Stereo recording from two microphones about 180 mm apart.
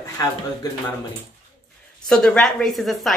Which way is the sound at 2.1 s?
5° left (ahead or behind).